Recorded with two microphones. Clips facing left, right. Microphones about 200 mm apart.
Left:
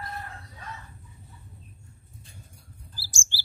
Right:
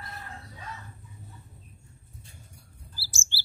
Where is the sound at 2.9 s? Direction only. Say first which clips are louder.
Even; 15° left (ahead or behind).